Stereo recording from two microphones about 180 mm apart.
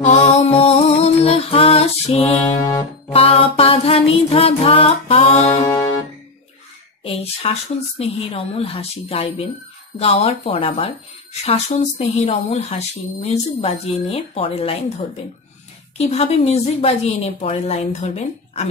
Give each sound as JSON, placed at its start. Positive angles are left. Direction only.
{"t": 0.0, "sound": "music", "side_deg": 40}
{"t": 5.7, "sound": "music", "side_deg": 25}
{"t": 7.0, "sound": "speech", "side_deg": 30}